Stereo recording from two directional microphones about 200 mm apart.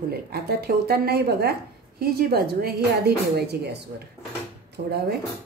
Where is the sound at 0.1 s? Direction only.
50° right (ahead or behind).